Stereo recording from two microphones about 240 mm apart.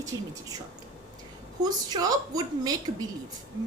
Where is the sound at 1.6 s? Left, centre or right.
Centre.